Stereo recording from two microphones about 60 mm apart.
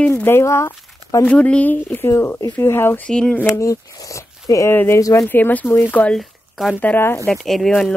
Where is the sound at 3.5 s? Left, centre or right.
Left.